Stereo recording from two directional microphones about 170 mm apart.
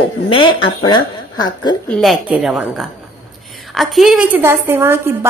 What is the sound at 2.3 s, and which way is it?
A woman's voice, 5° right (ahead or behind).